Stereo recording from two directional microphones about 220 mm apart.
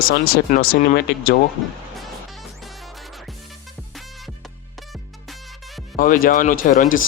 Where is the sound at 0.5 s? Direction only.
40° left (ahead or behind).